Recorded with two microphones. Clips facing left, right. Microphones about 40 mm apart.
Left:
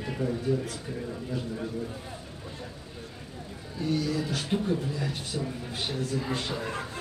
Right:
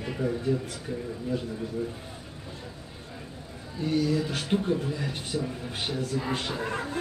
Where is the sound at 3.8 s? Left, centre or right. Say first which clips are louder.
Right 3 dB; right.